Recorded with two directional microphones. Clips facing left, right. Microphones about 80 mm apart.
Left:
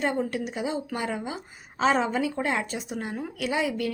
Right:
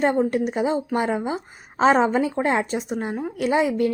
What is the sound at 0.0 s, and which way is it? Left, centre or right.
A woman's voice, right.